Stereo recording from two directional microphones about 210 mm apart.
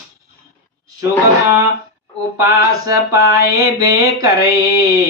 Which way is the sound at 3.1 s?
45° left (ahead or behind).